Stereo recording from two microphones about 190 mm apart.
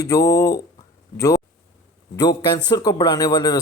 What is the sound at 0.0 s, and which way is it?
Speech, 15° left (ahead or behind).